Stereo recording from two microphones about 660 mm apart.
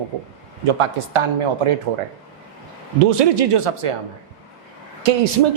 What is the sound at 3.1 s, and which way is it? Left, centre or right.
Speech, right.